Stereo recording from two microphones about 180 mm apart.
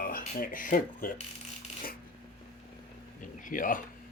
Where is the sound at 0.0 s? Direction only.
55° left (ahead or behind).